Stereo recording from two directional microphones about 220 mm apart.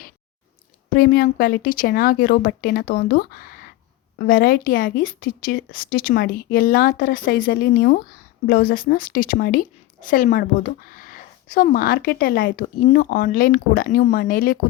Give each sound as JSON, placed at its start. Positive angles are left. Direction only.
{"t": 0.9, "sound": "a woman's voice", "side_deg": 40}